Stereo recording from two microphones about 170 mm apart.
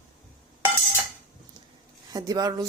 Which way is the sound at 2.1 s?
20° right (ahead or behind).